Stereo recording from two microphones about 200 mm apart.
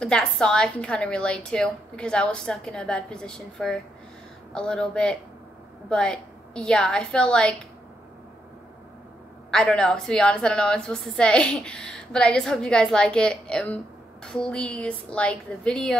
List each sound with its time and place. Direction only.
0.0 s a woman's voice: 5° left (ahead or behind)
9.5 s a woman's voice: 5° left (ahead or behind)